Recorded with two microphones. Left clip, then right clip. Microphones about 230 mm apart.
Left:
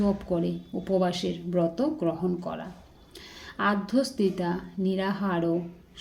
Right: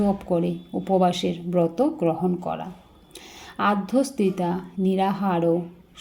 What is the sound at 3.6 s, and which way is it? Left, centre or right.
A woman's voice, centre.